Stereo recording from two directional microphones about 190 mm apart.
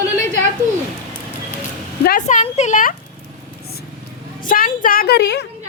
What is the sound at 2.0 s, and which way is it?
Speech, 45° left (ahead or behind).